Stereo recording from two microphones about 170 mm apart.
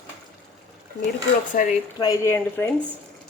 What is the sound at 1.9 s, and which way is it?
Speech, 20° left (ahead or behind).